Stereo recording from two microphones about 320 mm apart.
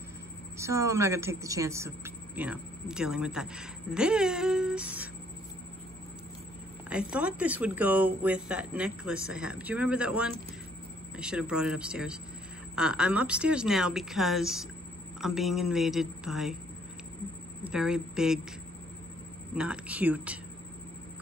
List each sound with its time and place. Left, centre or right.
0.6 s a woman's voice: centre
6.9 s a woman's voice: centre
17.6 s a woman's voice: centre
19.5 s a woman's voice: centre